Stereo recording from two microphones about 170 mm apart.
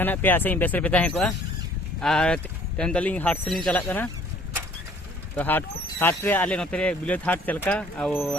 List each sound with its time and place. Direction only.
0.0 s speech: 10° left (ahead or behind)
5.4 s speech: 10° left (ahead or behind)